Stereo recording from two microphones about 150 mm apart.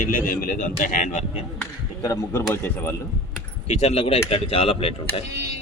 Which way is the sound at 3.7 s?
45° left (ahead or behind).